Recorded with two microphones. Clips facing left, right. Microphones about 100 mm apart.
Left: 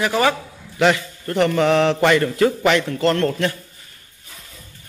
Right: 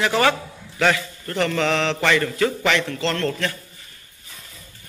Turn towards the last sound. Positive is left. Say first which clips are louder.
# left 5 dB
turn(degrees=15)  # may be behind; listen again after turning